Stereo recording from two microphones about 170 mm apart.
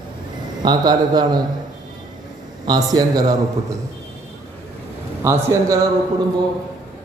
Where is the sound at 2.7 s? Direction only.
25° right (ahead or behind).